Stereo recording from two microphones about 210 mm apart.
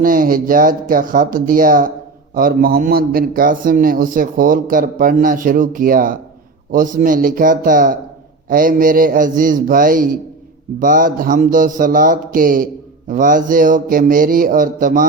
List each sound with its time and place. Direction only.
0.0 s a man's voice: 40° right (ahead or behind)